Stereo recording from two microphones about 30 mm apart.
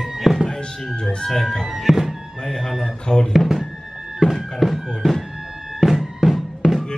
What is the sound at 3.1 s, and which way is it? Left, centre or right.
Music, centre.